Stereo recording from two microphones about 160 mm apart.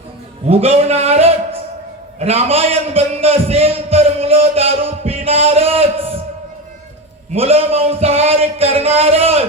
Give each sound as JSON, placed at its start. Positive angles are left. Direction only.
{"t": 0.4, "sound": "a man's voice", "side_deg": -40}
{"t": 7.3, "sound": "speech", "side_deg": -40}